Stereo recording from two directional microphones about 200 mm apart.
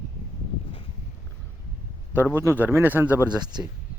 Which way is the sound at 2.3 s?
10° right (ahead or behind).